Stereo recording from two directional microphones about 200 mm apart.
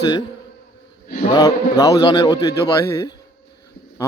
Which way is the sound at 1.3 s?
15° left (ahead or behind).